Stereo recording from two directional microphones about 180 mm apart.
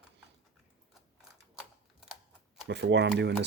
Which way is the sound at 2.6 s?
70° right (ahead or behind).